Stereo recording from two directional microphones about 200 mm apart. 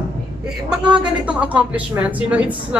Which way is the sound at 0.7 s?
5° right (ahead or behind).